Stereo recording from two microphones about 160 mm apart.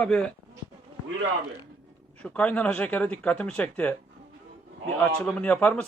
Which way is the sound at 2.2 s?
10° left (ahead or behind).